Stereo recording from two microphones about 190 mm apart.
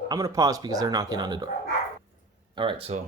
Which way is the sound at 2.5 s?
30° right (ahead or behind).